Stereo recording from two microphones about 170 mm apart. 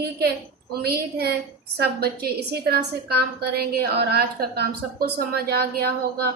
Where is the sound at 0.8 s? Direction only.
65° right (ahead or behind).